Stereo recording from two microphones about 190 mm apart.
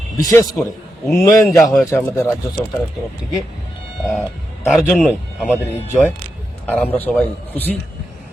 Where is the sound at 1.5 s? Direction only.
Centre (ahead or behind).